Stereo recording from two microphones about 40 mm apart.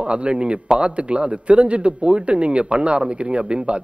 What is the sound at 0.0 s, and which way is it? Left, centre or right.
Speech, right.